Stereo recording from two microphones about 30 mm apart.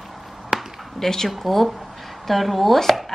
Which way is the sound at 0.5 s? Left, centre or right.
Centre.